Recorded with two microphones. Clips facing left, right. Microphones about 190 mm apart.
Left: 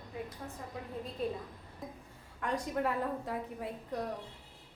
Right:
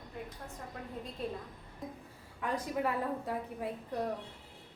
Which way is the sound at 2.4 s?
Centre (ahead or behind).